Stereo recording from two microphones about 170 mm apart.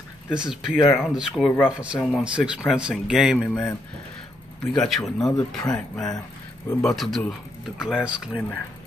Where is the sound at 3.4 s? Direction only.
5° left (ahead or behind).